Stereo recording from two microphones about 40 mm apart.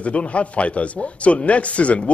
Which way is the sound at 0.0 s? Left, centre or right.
Left.